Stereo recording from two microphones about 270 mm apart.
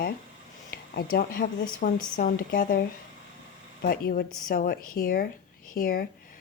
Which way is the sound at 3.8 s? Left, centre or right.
Left.